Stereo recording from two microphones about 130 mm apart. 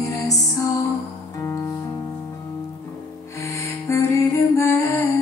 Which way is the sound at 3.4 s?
25° left (ahead or behind).